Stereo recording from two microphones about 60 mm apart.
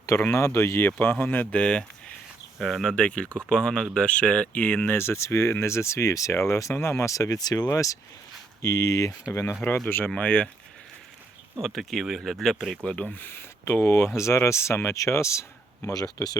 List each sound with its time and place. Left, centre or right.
0.3 s speech: left
0.9 s speech: left
2.6 s speech: centre
2.8 s speech: centre
4.9 s speech: left
7.7 s speech: left
9.3 s speech: left
10.2 s speech: centre
11.6 s speech: centre
12.8 s speech: centre
13.1 s speech: left
15.9 s speech: left